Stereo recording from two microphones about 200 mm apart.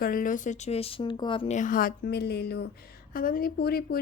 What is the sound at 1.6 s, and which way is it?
A woman's voice, 45° left (ahead or behind).